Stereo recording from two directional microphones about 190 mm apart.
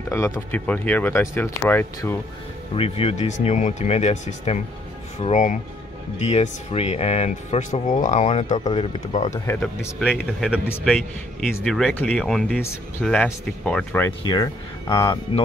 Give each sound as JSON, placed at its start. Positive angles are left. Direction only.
{"t": 0.1, "sound": "speech", "side_deg": 15}
{"t": 2.7, "sound": "speech", "side_deg": 30}
{"t": 9.9, "sound": "speech", "side_deg": 0}
{"t": 14.2, "sound": "speech", "side_deg": 25}